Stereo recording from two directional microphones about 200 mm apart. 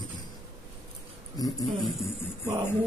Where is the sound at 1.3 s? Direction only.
20° left (ahead or behind).